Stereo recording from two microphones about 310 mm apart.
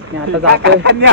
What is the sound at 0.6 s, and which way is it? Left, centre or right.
Speech, right.